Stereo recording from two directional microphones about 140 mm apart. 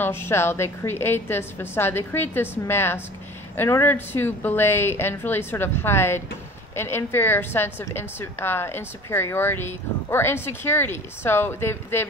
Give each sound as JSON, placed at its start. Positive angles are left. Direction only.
{"t": 0.0, "sound": "a woman's voice", "side_deg": 15}